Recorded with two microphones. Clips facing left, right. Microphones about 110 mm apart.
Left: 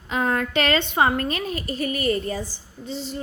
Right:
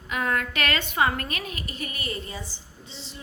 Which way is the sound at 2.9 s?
45° left (ahead or behind).